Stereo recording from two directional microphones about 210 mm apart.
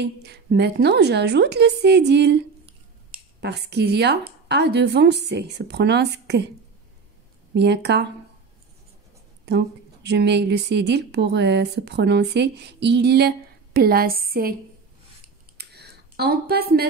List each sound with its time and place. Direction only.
0.0 s a woman's voice: 50° right (ahead or behind)
7.5 s a woman's voice: 55° right (ahead or behind)
9.5 s a woman's voice: 50° right (ahead or behind)
15.5 s a sound: 50° right (ahead or behind)